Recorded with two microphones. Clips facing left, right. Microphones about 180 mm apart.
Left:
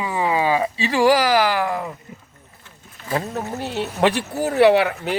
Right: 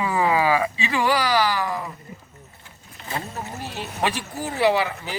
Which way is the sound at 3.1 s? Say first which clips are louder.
Left 7 dB; 65° left (ahead or behind).